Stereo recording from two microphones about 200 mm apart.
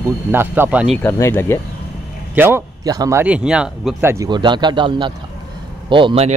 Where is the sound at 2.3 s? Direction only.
10° right (ahead or behind); by 6.3 s 30° right (ahead or behind).